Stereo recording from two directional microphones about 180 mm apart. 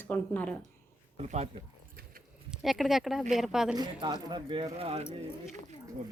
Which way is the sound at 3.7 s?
25° right (ahead or behind).